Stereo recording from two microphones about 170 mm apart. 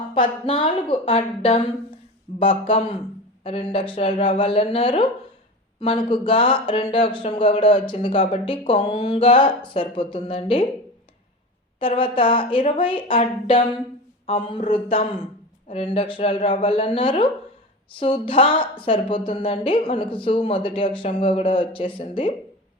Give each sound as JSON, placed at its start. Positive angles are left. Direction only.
{"t": 0.1, "sound": "speech", "side_deg": 30}
{"t": 11.8, "sound": "speech", "side_deg": 30}